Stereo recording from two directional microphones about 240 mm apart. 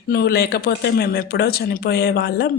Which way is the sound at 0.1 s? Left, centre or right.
Left.